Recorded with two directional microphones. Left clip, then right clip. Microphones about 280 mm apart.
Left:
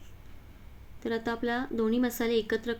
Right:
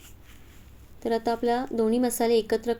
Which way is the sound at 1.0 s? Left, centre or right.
Centre.